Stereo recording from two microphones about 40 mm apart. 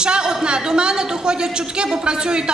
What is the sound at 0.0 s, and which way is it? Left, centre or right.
A woman's voice, right.